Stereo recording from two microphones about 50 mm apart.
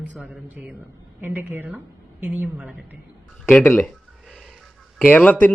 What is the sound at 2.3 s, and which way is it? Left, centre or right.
Speech, centre.